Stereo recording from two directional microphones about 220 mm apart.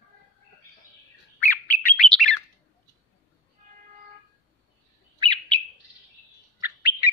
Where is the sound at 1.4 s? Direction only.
10° left (ahead or behind).